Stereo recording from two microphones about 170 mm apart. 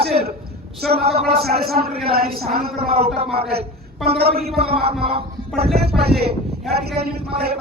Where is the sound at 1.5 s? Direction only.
65° right (ahead or behind).